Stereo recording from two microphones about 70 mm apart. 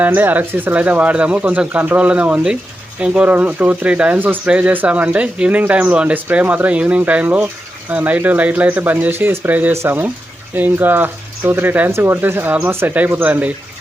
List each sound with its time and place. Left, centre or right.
0.0 s speech: right
11.9 s speech: right